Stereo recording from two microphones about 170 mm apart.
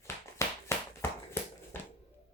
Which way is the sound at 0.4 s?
15° left (ahead or behind).